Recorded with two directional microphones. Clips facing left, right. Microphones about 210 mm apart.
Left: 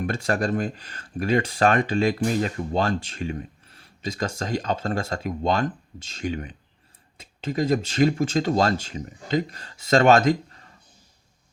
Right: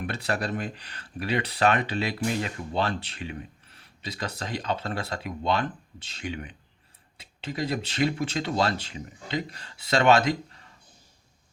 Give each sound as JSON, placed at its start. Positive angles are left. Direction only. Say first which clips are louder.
{"t": 0.0, "sound": "speech", "louder": "left 5 dB", "side_deg": 45}